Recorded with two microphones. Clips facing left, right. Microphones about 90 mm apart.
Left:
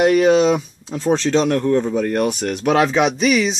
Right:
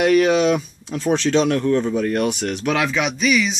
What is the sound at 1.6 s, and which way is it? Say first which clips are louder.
Speech: left 1 dB; 20° left (ahead or behind).